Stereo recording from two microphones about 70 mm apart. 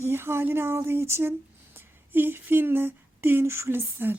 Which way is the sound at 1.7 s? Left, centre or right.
Right.